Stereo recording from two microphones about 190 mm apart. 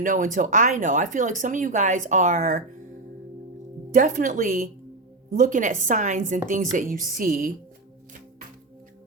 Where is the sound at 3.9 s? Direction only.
45° right (ahead or behind).